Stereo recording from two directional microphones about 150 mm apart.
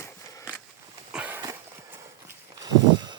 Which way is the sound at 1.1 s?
10° right (ahead or behind).